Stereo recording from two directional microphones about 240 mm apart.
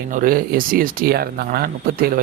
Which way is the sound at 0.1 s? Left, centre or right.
Right.